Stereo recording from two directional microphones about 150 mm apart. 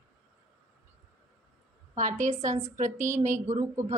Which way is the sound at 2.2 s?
50° right (ahead or behind).